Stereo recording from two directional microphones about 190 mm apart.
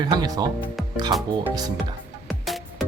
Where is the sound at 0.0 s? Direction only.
20° right (ahead or behind).